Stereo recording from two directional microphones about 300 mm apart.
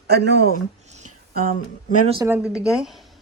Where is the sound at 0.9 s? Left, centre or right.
Right.